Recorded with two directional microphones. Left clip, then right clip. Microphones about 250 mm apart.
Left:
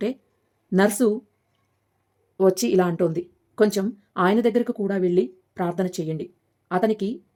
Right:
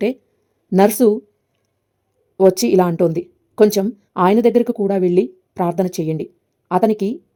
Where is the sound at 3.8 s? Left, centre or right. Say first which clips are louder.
Right 6 dB; centre.